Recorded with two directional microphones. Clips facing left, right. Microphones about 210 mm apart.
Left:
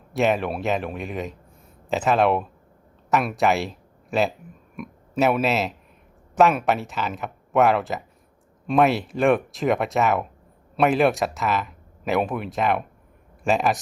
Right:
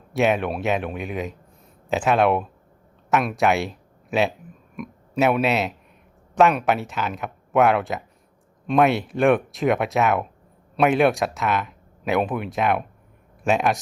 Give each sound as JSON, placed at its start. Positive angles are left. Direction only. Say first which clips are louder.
{"t": 0.1, "sound": "speech", "louder": "right 1 dB", "side_deg": 0}